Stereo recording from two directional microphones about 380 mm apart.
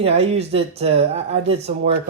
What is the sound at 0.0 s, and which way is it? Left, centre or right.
Speech, centre.